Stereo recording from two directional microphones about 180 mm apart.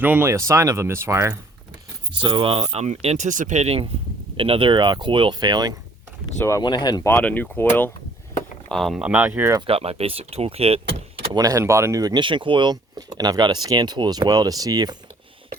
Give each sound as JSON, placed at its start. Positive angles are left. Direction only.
{"t": 0.0, "sound": "speech", "side_deg": -10}
{"t": 2.2, "sound": "speech", "side_deg": -30}
{"t": 6.4, "sound": "speech", "side_deg": 20}
{"t": 9.6, "sound": "speech", "side_deg": -35}
{"t": 11.3, "sound": "speech", "side_deg": -20}